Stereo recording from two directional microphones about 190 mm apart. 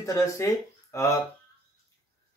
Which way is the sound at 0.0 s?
15° left (ahead or behind).